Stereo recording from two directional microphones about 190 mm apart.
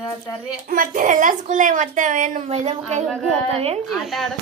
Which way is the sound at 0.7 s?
45° right (ahead or behind).